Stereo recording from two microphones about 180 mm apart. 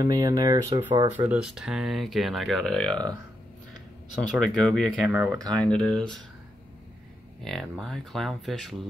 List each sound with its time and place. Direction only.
0.0 s speech: 20° right (ahead or behind)
1.1 s speech: 10° right (ahead or behind)
4.2 s speech: centre (ahead or behind)
5.2 s speech: 20° right (ahead or behind)
5.6 s speech: 5° left (ahead or behind)
7.4 s speech: centre (ahead or behind)